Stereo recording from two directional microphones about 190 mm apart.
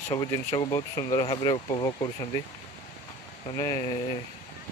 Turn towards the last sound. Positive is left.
turn(degrees=20)  # may be behind; listen again after turning